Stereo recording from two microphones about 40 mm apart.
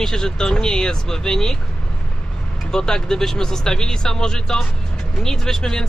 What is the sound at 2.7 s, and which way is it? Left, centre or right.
Speech, centre.